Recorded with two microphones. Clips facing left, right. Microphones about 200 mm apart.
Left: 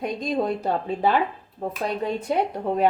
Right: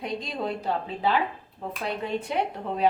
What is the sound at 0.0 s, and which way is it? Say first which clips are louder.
A woman's voice: left 6 dB; 45° left (ahead or behind).